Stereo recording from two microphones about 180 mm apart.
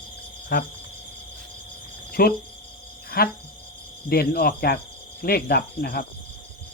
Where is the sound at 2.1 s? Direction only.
55° left (ahead or behind).